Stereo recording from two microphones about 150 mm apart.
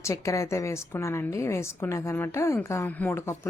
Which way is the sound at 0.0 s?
20° left (ahead or behind).